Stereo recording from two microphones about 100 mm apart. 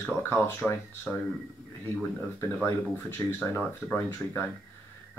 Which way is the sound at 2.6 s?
20° left (ahead or behind).